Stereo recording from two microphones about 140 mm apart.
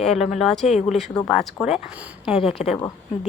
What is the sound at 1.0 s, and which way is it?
Speech, 5° left (ahead or behind).